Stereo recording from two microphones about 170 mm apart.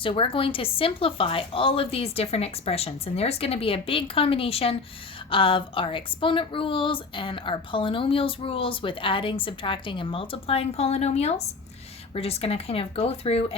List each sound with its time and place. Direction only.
0.0 s a woman's voice: 30° left (ahead or behind)